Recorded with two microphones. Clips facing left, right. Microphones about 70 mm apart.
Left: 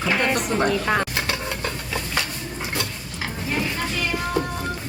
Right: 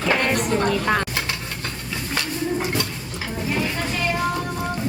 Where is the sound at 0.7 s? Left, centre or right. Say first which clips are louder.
Right 1 dB; centre.